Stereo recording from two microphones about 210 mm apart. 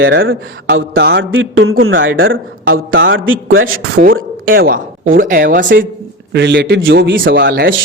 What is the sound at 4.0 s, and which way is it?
Speech, 45° right (ahead or behind).